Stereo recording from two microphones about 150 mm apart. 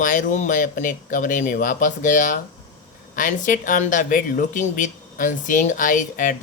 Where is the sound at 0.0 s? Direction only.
60° left (ahead or behind).